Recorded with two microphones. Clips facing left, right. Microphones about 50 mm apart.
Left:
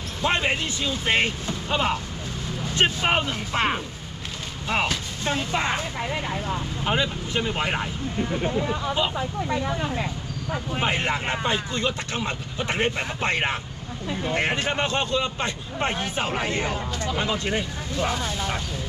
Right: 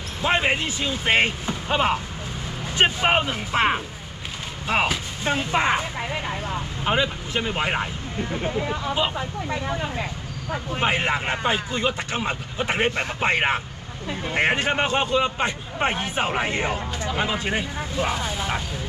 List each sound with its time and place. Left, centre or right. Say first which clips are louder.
0.2 s speech: right 2 dB; centre